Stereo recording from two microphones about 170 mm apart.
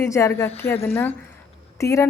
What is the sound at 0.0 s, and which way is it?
Speech, 15° left (ahead or behind).